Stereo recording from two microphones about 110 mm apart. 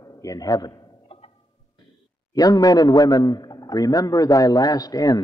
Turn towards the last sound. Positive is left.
turn(degrees=35)  # may be behind; listen again after turning